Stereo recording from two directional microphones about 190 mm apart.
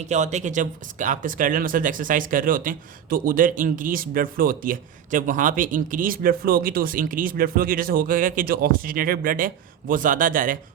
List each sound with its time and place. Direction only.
0.0 s speech: 35° right (ahead or behind)